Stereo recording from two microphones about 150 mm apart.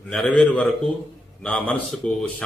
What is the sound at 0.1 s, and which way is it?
Speech, 5° left (ahead or behind).